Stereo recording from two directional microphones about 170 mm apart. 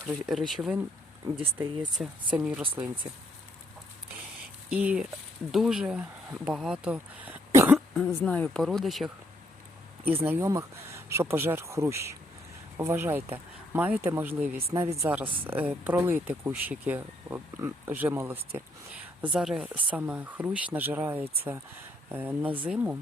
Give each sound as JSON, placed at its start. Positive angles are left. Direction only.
{"t": 0.0, "sound": "speech", "side_deg": -5}
{"t": 4.7, "sound": "speech", "side_deg": -5}
{"t": 7.9, "sound": "speech", "side_deg": 5}
{"t": 10.2, "sound": "speech", "side_deg": -15}